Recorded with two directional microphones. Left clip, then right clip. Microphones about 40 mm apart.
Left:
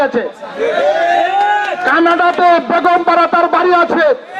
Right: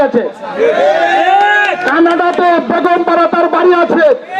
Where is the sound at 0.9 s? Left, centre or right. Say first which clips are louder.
Right 3 dB; centre.